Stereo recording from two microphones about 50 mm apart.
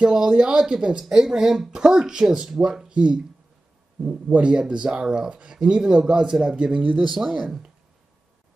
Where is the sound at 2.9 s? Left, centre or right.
Right.